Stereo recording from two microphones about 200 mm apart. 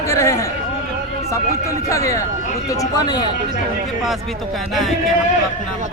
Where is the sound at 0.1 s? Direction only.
15° left (ahead or behind).